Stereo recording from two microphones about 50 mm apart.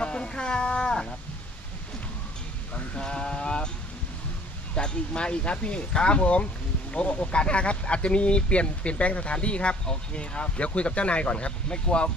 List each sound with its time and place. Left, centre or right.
0.0 s a sound: centre
3.0 s speech: centre
4.7 s speech: centre